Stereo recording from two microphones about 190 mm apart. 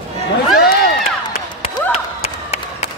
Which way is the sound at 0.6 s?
50° left (ahead or behind).